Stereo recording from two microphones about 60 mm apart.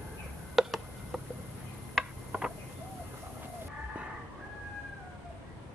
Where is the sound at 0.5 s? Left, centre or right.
Centre.